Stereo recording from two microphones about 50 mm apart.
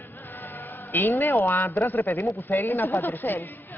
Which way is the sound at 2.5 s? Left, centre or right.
Left.